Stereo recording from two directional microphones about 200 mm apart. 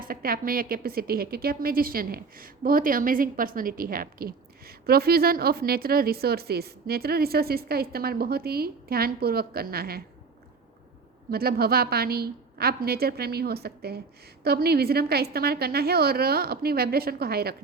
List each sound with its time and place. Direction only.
0.0 s a woman's voice: 45° right (ahead or behind)
11.3 s a woman's voice: 50° right (ahead or behind)